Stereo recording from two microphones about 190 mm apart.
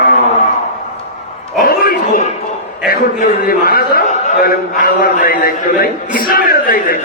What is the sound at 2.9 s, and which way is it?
A man's voice, 45° left (ahead or behind).